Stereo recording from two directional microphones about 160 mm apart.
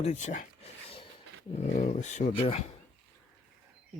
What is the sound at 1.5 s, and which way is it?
Speech, 50° left (ahead or behind).